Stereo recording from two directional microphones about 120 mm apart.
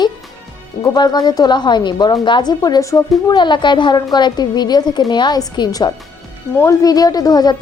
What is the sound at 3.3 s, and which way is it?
A woman's voice, 40° left (ahead or behind).